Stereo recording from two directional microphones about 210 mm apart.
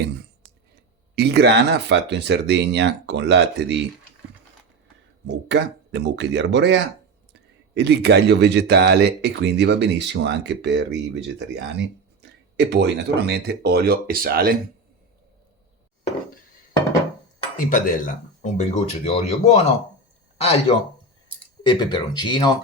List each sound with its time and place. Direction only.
1.1 s speech: 50° right (ahead or behind)
5.2 s speech: 55° right (ahead or behind)
17.7 s speech: 40° left (ahead or behind); by 22.5 s 20° left (ahead or behind)